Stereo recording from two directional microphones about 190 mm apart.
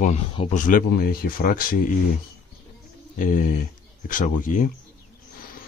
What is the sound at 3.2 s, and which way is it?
Speech, 45° left (ahead or behind).